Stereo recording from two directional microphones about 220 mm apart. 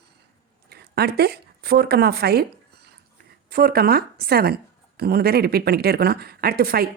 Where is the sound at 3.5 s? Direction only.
45° right (ahead or behind).